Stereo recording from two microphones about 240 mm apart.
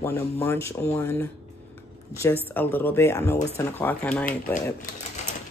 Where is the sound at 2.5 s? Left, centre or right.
Centre.